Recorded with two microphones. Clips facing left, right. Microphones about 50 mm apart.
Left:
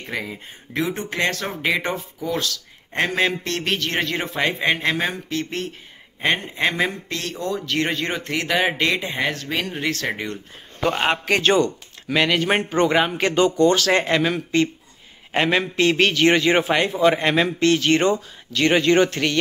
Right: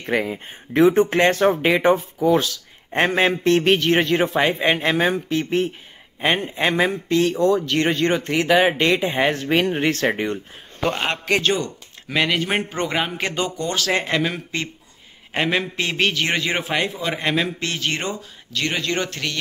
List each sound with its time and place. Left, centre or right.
0.0 s a man's voice: right; by 9.2 s centre
9.2 s speech: right
10.9 s a man's voice: centre
17.6 s a man's voice: centre
18.7 s speech: left